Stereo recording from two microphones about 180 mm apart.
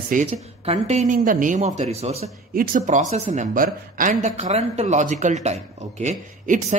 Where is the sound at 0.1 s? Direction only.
40° right (ahead or behind).